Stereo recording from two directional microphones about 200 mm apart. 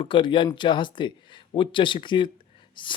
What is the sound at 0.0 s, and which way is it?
Speech, 25° left (ahead or behind).